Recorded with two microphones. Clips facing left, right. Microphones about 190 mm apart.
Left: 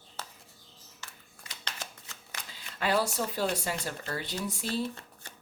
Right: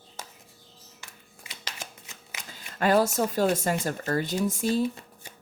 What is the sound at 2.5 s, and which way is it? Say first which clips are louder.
Speech: right 6 dB; 45° right (ahead or behind).